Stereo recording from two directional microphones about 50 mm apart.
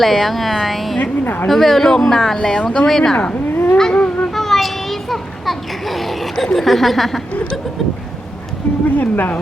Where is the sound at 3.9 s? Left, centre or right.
Left.